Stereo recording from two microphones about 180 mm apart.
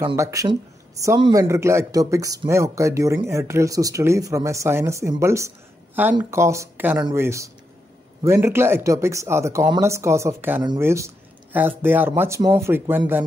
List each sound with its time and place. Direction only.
0.0 s speech: 15° right (ahead or behind)